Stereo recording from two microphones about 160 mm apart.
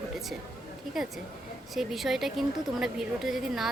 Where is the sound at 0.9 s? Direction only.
Centre (ahead or behind).